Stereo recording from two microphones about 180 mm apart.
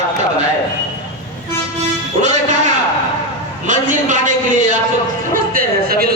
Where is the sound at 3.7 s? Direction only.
45° right (ahead or behind).